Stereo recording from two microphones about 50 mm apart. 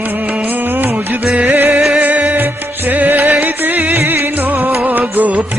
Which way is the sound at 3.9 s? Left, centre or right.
Right.